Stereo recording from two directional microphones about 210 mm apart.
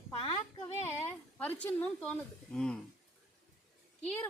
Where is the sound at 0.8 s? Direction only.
10° left (ahead or behind).